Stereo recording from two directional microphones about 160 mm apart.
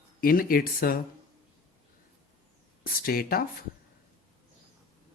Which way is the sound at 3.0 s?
65° left (ahead or behind).